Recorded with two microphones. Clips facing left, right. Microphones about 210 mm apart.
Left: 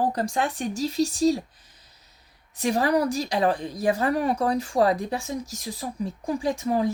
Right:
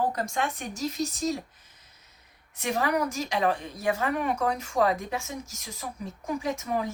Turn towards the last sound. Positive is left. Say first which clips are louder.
# left 6 dB
turn(degrees=35)  # may be behind; listen again after turning